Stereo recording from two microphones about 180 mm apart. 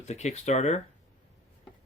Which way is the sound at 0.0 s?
40° left (ahead or behind).